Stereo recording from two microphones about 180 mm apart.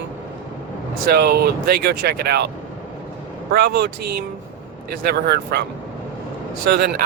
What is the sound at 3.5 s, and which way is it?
Speech, 60° right (ahead or behind).